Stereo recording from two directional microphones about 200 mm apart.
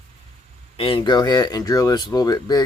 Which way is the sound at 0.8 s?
25° left (ahead or behind).